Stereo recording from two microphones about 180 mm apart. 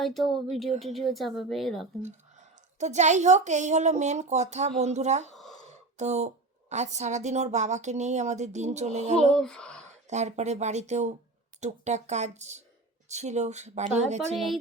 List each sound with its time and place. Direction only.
0.0 s a woman's voice: centre (ahead or behind)
2.7 s a woman's voice: 40° right (ahead or behind)
9.3 s a woman's voice: 5° left (ahead or behind)
10.1 s a woman's voice: 40° right (ahead or behind)